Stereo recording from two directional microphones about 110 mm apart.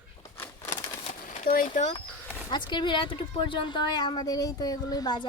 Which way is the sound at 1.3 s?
90° left.